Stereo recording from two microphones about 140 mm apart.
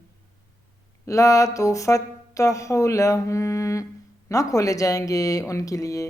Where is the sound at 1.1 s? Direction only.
20° left (ahead or behind).